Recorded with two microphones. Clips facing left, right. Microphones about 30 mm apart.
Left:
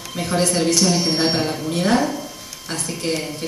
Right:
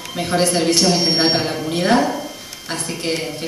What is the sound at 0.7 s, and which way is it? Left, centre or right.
A woman's voice, right.